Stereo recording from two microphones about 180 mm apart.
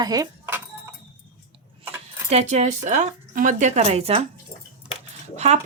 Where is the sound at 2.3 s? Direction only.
40° right (ahead or behind).